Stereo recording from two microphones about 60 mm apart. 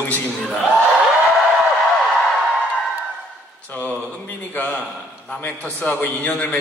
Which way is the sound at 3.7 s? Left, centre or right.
Left.